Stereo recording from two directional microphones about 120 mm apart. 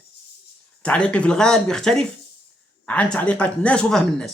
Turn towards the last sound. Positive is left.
turn(degrees=5)  # may be behind; listen again after turning